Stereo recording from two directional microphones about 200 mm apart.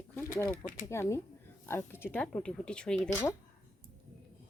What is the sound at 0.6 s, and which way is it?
Speech, 45° left (ahead or behind).